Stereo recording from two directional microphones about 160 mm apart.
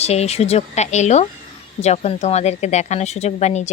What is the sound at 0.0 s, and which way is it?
Speech, 40° left (ahead or behind).